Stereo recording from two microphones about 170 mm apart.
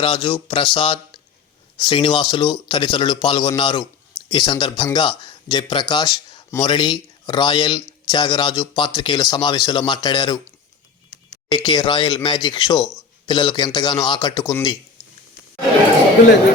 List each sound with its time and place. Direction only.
0.0 s speech: 30° left (ahead or behind)
11.4 s speech: 25° left (ahead or behind)